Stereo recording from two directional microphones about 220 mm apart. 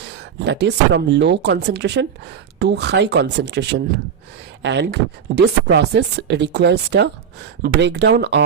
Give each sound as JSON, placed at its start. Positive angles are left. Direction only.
{"t": 0.0, "sound": "speech", "side_deg": -50}